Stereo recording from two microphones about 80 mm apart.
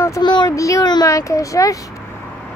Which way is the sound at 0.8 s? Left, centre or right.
Left.